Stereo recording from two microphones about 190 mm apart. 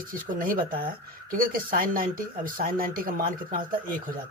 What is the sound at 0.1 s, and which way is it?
Speech, 45° right (ahead or behind).